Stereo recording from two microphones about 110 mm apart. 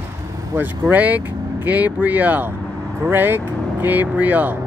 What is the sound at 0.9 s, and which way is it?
Speech, 15° right (ahead or behind).